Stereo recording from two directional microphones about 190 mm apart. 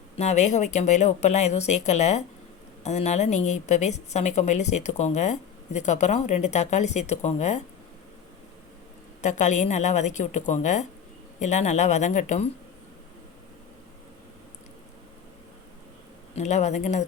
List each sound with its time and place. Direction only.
0.2 s a woman's voice: 35° left (ahead or behind)
9.2 s a woman's voice: 40° left (ahead or behind)
16.3 s a woman's voice: 35° left (ahead or behind)